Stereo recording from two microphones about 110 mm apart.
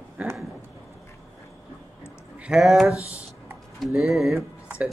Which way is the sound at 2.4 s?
5° right (ahead or behind).